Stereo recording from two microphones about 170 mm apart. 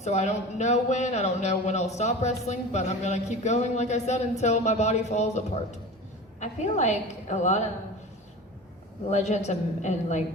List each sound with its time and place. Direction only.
0.0 s speech: 40° left (ahead or behind)
6.4 s a woman's voice: 45° left (ahead or behind)
9.0 s a woman's voice: 40° left (ahead or behind)